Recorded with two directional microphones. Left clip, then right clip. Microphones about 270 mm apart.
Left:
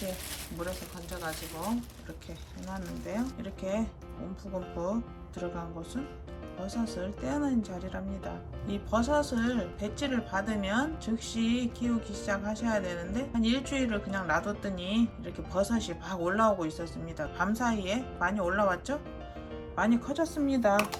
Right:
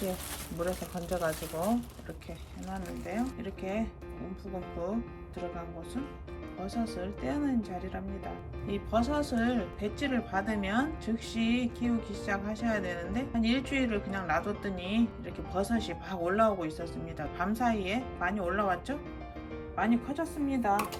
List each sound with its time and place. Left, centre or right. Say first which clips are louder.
0.6 s speech: right 5 dB; centre
3.6 s speech: left 2 dB; centre
6.7 s speech: even; centre
8.9 s speech: left 2 dB; centre
20.5 s speech: left 2 dB; left